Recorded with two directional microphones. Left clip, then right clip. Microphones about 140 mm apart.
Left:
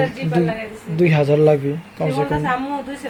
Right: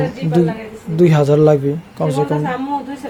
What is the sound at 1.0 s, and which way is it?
Speech, 30° right (ahead or behind).